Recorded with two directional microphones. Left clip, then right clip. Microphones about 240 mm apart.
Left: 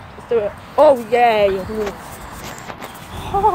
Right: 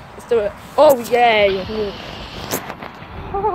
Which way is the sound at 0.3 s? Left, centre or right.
Centre.